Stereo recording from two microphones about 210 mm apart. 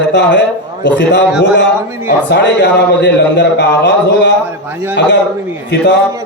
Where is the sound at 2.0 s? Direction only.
55° left (ahead or behind).